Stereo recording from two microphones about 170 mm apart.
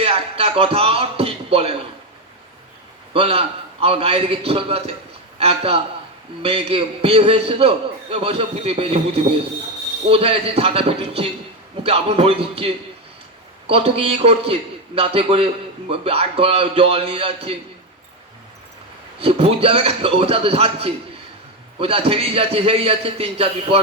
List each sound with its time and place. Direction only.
0.0 s music: 35° right (ahead or behind)
3.1 s a man's voice: 35° right (ahead or behind)
19.2 s a man's voice: 35° right (ahead or behind)